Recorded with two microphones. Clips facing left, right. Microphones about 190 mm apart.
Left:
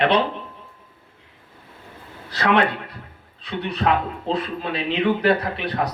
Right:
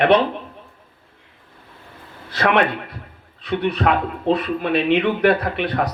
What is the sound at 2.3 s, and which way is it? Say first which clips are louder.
A man's voice: right 1 dB; 60° right (ahead or behind).